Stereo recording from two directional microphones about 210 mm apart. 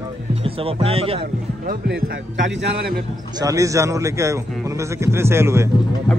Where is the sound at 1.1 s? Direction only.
45° right (ahead or behind).